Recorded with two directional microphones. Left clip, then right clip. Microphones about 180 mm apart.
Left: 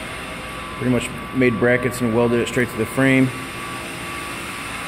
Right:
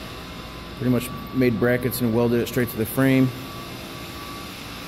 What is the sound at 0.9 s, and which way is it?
Speech, 5° right (ahead or behind).